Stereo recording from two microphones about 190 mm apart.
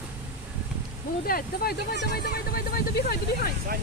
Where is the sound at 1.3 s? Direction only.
50° left (ahead or behind).